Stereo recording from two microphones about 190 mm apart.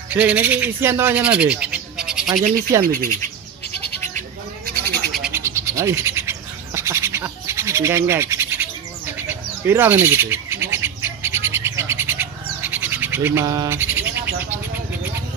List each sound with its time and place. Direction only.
0.1 s speech: 10° right (ahead or behind)
2.8 s speech: 50° right (ahead or behind)
4.8 s frog: 55° right (ahead or behind)
5.1 s bird: 10° right (ahead or behind)